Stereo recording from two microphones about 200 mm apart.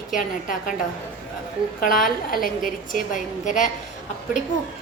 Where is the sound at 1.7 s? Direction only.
45° left (ahead or behind).